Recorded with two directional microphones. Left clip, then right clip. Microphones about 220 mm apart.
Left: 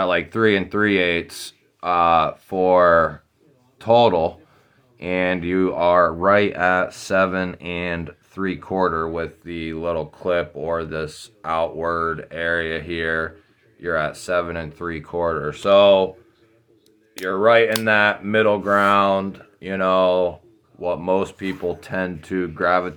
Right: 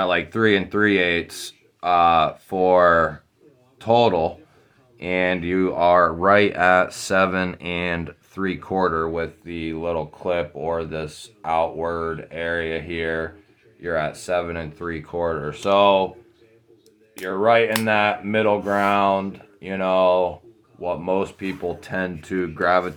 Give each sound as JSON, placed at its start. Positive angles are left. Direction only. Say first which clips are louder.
{"t": 0.0, "sound": "speech", "louder": "left 1 dB", "side_deg": 10}
{"t": 17.2, "sound": "speech", "louder": "left 2 dB", "side_deg": 20}